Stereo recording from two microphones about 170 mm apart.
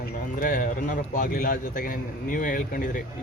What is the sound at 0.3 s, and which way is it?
A man's voice, 55° left (ahead or behind).